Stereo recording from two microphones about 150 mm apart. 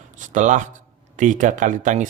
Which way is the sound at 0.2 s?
55° right (ahead or behind).